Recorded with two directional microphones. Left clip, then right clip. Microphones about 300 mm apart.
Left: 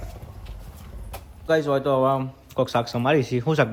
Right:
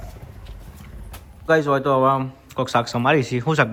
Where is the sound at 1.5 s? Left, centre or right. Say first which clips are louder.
Right 3 dB; centre.